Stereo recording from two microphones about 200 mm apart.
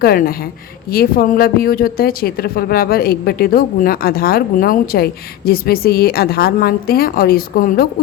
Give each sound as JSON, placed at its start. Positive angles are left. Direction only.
{"t": 0.0, "sound": "speech", "side_deg": 50}